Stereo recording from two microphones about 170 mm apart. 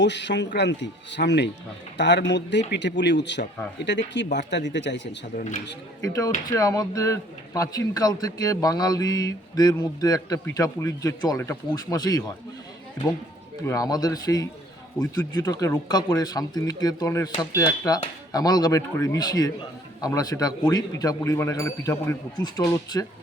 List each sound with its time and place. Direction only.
0.0 s speech: 90° left
5.4 s a man's voice: 50° left (ahead or behind)
6.0 s a man's voice: 20° left (ahead or behind)
13.7 s a man's voice: 20° left (ahead or behind)